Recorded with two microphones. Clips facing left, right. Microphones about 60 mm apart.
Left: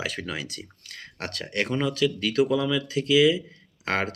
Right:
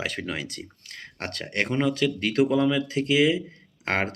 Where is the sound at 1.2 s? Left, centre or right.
Right.